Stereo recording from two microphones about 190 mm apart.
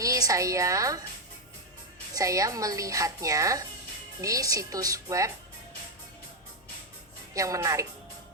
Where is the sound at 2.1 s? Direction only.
15° right (ahead or behind).